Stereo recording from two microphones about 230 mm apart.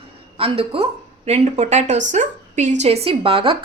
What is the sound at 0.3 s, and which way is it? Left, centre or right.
A woman's voice, right.